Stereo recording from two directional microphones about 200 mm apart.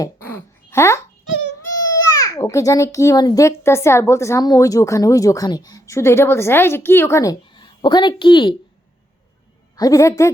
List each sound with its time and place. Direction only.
0.0 s a sound: 10° left (ahead or behind)
2.1 s a child's voice: 15° left (ahead or behind)
9.7 s a child's voice: 15° left (ahead or behind)